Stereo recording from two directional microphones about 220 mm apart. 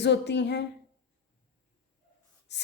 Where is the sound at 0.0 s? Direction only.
50° left (ahead or behind).